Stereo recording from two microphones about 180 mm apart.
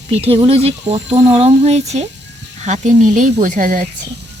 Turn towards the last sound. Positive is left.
turn(degrees=-50)  # may be behind; listen again after turning